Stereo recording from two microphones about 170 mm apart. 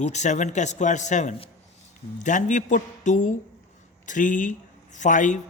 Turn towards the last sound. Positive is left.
turn(degrees=50)  # may be behind; listen again after turning